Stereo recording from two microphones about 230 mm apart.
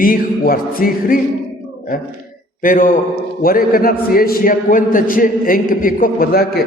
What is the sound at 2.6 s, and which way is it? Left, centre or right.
A man's voice, left.